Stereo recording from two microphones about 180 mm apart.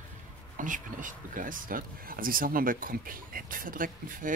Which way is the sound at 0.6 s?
45° right (ahead or behind).